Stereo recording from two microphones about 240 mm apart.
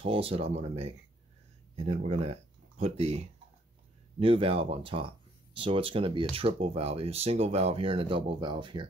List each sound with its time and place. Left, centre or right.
0.0 s speech: right